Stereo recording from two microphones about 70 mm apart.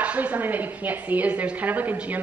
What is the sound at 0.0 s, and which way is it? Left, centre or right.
A woman's voice, right.